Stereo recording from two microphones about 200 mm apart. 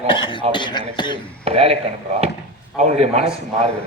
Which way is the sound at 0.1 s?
25° left (ahead or behind).